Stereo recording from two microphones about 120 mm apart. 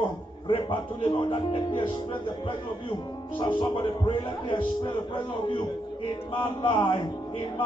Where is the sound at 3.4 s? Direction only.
40° left (ahead or behind).